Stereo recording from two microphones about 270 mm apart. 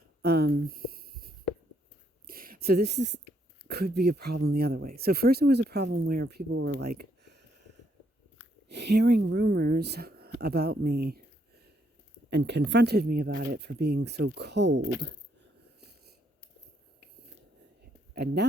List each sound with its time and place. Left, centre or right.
0.2 s a sound: right
3.7 s speech: right
6.7 s a sound: right
8.7 s speech: right
12.3 s speech: right
18.1 s speech: right